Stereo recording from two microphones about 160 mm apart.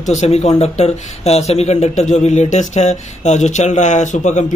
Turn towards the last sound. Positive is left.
turn(degrees=50)  # may be behind; listen again after turning